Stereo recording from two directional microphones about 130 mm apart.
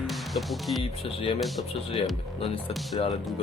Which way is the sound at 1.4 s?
Centre (ahead or behind).